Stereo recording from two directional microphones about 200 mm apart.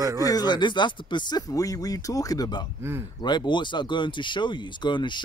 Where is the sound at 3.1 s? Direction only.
20° left (ahead or behind).